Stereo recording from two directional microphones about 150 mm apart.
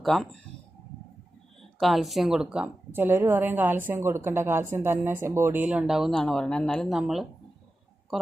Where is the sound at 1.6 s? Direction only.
Centre (ahead or behind).